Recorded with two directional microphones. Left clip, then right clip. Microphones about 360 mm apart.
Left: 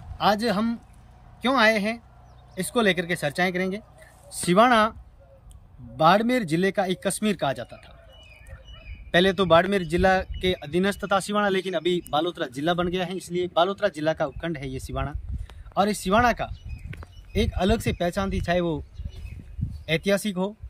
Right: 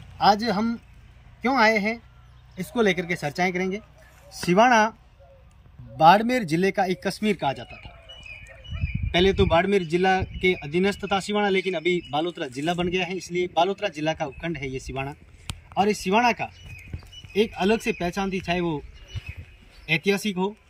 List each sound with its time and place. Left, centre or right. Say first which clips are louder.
0.2 s speech: right 2 dB; centre
5.9 s speech: right 3 dB; centre
7.2 s speech: right 1 dB; centre
9.1 s speech: left 2 dB; centre
19.9 s speech: even; centre